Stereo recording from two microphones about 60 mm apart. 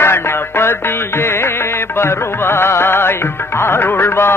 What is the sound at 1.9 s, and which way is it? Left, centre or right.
Music, left.